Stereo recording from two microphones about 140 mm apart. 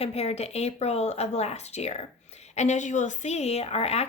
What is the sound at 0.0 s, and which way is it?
A woman's voice, 45° left (ahead or behind).